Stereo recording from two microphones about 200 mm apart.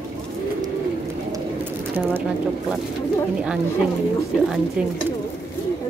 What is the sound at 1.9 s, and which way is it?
Speech, 10° right (ahead or behind).